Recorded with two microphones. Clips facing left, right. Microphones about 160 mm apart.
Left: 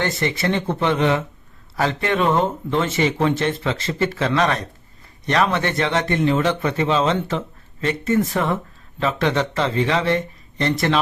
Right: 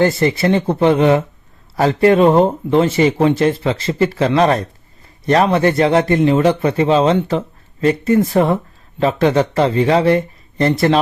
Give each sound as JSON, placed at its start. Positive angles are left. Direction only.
{"t": 0.2, "sound": "a man's voice", "side_deg": -35}